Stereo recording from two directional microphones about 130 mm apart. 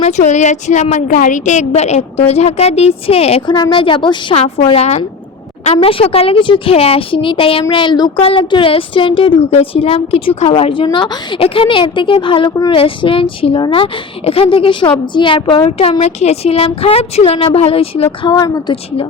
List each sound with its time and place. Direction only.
0.0 s a woman's voice: 60° left (ahead or behind)
3.5 s a woman's voice: 35° left (ahead or behind)
4.4 s a woman's voice: 50° left (ahead or behind)
18.3 s speech: 30° left (ahead or behind)